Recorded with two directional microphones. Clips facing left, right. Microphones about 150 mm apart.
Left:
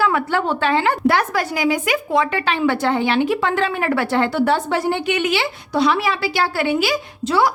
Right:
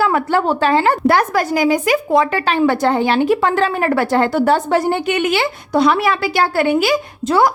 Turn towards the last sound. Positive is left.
turn(degrees=-50)  # may be behind; listen again after turning